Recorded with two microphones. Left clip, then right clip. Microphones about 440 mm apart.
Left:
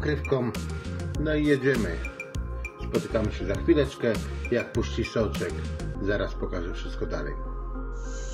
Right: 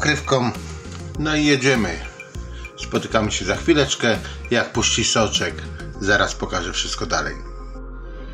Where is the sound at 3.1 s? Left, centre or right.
Right.